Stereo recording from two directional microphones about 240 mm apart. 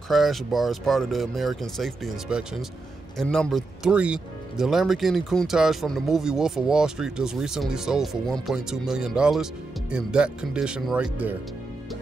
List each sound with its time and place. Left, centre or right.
0.1 s speech: centre